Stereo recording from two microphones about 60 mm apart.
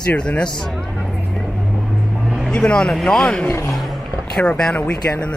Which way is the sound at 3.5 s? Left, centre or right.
Left.